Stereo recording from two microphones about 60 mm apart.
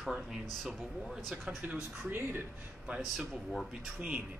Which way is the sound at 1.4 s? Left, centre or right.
Centre.